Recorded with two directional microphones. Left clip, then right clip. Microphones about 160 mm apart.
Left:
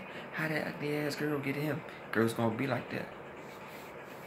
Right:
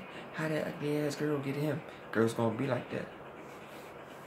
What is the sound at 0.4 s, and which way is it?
Speech, 20° right (ahead or behind).